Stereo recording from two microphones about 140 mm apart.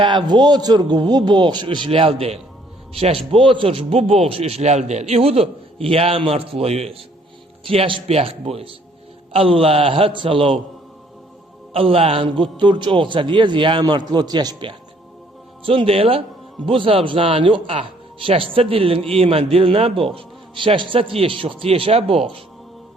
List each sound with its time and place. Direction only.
0.3 s a man's voice: 30° right (ahead or behind)
11.7 s a man's voice: 40° right (ahead or behind)